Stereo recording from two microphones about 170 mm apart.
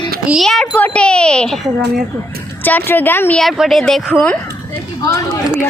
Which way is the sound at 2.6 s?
10° left (ahead or behind).